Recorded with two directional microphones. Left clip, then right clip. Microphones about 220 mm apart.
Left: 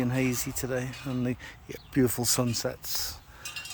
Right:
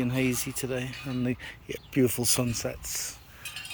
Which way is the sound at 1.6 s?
60° left (ahead or behind).